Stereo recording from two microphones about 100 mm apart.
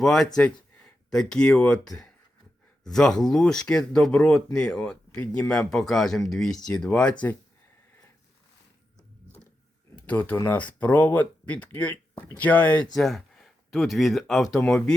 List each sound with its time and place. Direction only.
0.0 s speech: 5° left (ahead or behind)
9.9 s speech: 15° left (ahead or behind)
12.9 s speech: centre (ahead or behind)
14.6 s speech: 10° left (ahead or behind)